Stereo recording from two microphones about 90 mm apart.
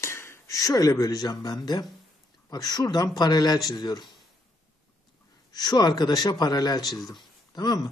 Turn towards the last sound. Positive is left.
turn(degrees=45)  # may be behind; listen again after turning